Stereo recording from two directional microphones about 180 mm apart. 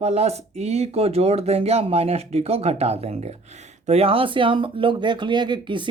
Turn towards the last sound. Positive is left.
turn(degrees=-25)  # may be behind; listen again after turning